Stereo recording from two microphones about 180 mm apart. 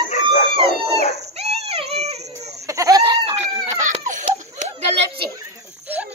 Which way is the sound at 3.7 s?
40° right (ahead or behind).